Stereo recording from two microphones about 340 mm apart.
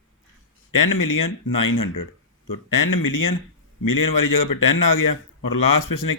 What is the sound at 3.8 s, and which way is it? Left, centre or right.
Speech, left.